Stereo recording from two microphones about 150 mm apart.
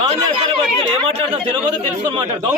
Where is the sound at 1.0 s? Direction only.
35° right (ahead or behind).